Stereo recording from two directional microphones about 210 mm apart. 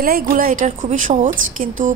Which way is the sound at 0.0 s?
45° right (ahead or behind).